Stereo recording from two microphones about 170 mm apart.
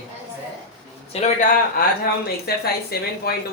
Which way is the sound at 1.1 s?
45° left (ahead or behind).